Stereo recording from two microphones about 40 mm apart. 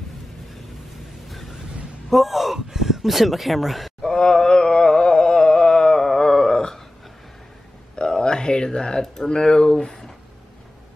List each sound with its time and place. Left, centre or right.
2.0 s speech: centre
4.0 s carnatic music: centre
7.9 s speech: left